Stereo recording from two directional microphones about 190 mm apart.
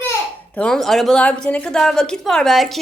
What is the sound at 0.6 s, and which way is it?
A woman's voice, centre (ahead or behind).